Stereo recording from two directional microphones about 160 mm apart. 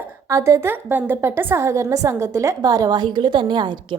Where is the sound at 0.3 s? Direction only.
20° right (ahead or behind).